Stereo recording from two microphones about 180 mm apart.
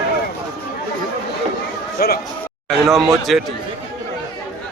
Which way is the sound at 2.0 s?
55° left (ahead or behind).